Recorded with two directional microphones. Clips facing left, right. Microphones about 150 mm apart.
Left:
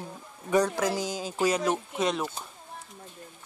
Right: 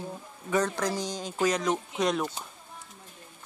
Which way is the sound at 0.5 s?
10° left (ahead or behind).